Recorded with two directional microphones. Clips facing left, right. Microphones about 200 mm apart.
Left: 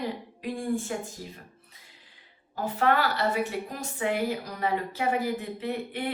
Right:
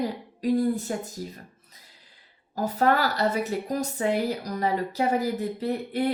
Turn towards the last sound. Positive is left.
turn(degrees=-40)  # may be behind; listen again after turning